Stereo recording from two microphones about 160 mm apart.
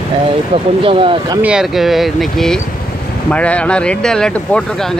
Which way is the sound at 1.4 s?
5° right (ahead or behind).